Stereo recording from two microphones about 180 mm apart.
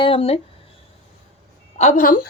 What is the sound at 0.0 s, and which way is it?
Speech, 30° left (ahead or behind).